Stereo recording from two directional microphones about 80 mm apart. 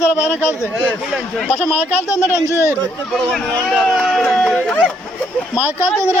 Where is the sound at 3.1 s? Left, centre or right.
Centre.